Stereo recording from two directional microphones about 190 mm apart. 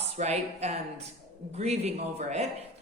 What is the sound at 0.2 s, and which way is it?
A woman's voice, 35° right (ahead or behind).